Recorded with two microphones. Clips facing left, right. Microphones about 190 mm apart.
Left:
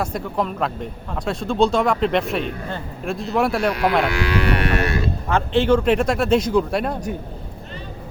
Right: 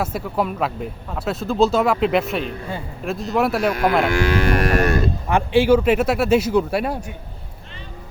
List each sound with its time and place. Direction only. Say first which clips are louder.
0.0 s speech: right 1 dB; 5° right (ahead or behind)
4.1 s moo: right 2 dB; 45° right (ahead or behind)
5.3 s speech: right 2 dB; 10° right (ahead or behind)